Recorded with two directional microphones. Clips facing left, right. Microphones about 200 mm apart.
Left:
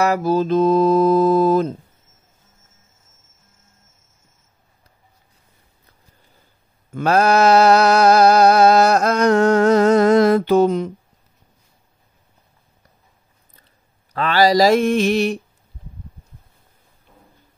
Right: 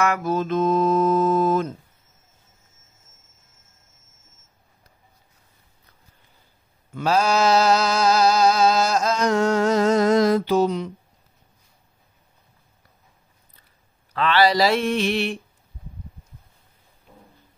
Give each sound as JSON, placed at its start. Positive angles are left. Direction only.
{"t": 0.0, "sound": "mantra", "side_deg": 35}
{"t": 6.9, "sound": "a sound", "side_deg": 55}
{"t": 14.1, "sound": "mantra", "side_deg": 45}